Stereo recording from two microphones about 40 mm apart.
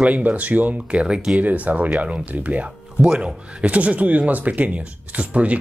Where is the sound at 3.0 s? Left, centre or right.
Right.